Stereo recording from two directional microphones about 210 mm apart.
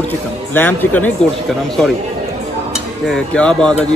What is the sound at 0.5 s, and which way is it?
Speech, 10° left (ahead or behind).